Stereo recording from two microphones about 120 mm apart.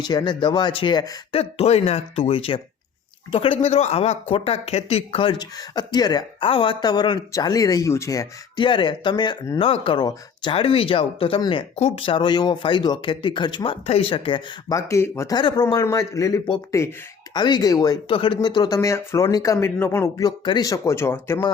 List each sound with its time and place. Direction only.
0.0 s speech: 35° left (ahead or behind)
1.3 s speech: 55° left (ahead or behind); by 6.2 s 35° left (ahead or behind)
6.4 s speech: 45° left (ahead or behind); by 8.3 s 25° left (ahead or behind)
8.5 s speech: 45° left (ahead or behind)
9.6 s speech: 50° left (ahead or behind)
13.8 s speech: 55° left (ahead or behind)
14.7 s speech: 25° left (ahead or behind)
15.4 s speech: 40° left (ahead or behind)
15.6 s speech: 25° left (ahead or behind)
17.3 s speech: 35° left (ahead or behind)
18.1 s speech: 45° left (ahead or behind); by 20.3 s 25° left (ahead or behind)
20.4 s speech: 40° left (ahead or behind)
20.7 s speech: 25° left (ahead or behind)